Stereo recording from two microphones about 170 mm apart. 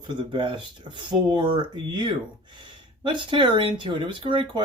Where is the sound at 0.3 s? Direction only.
30° right (ahead or behind).